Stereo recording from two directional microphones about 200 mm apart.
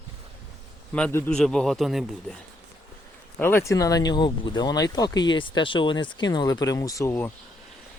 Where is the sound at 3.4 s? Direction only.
10° left (ahead or behind).